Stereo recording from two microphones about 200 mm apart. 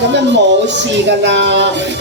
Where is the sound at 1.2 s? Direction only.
60° right (ahead or behind).